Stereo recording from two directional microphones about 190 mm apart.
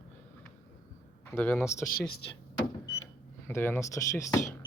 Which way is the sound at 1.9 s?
55° left (ahead or behind).